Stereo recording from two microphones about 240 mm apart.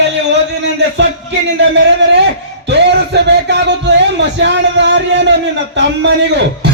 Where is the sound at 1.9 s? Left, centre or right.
Right.